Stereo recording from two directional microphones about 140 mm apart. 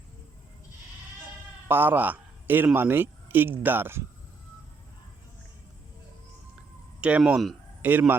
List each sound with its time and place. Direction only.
1.6 s a man's voice: 15° right (ahead or behind)
7.0 s speech: 10° right (ahead or behind)